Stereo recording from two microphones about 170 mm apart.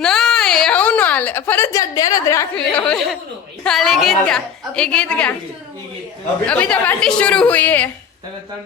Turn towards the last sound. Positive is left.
turn(degrees=10)  # may be behind; listen again after turning